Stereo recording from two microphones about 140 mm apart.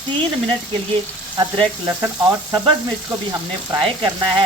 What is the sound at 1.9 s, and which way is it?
Frying, 25° right (ahead or behind).